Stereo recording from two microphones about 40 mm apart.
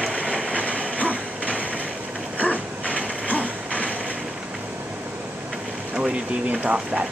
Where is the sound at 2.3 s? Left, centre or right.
Left.